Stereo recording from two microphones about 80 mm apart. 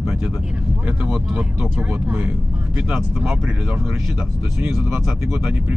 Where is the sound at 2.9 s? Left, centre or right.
Centre.